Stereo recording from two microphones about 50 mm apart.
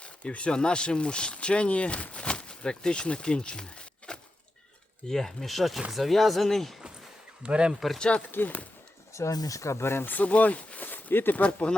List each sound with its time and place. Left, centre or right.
0.0 s speech: left
5.0 s speech: centre
7.4 s speech: centre
7.9 s speech: centre
8.3 s speech: left
9.1 s speech: left
10.1 s speech: left